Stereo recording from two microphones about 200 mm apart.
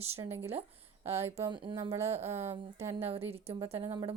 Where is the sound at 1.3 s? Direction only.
30° right (ahead or behind).